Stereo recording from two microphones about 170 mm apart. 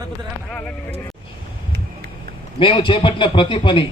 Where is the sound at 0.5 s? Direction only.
5° left (ahead or behind).